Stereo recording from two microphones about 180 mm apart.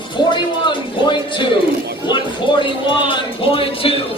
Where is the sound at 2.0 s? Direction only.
25° left (ahead or behind).